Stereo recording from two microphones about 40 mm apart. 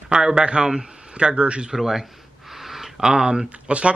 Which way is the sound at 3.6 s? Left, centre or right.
Right.